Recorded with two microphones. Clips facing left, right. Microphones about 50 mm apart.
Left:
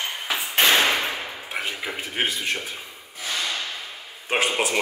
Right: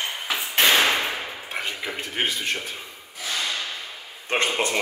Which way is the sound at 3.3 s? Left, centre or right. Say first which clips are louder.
Even; centre.